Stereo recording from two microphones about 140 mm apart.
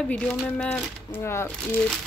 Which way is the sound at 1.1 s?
20° left (ahead or behind).